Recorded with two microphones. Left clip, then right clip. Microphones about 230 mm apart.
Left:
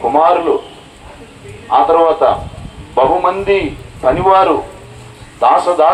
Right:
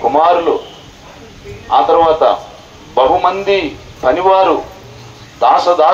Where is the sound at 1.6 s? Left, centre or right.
Right.